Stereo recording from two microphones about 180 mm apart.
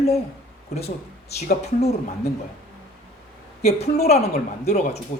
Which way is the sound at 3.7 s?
35° left (ahead or behind).